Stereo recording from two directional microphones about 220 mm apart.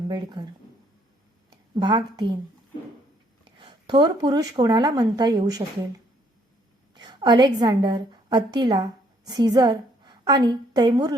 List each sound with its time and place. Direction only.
0.1 s speech: 20° right (ahead or behind)
1.7 s speech: 20° right (ahead or behind)
3.6 s speech: 20° right (ahead or behind)
6.9 s a woman's voice: 20° right (ahead or behind)